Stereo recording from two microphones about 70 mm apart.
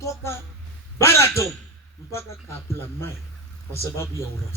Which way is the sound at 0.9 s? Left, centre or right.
Left.